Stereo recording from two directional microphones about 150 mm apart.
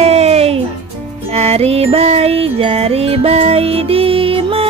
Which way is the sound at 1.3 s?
45° right (ahead or behind).